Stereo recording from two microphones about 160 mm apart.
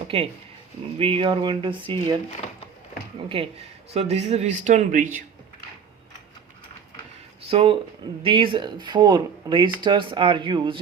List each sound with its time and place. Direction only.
0.1 s speech: 40° right (ahead or behind)
3.2 s a man's voice: 35° right (ahead or behind); by 5.2 s 55° right (ahead or behind)
7.4 s speech: 35° right (ahead or behind)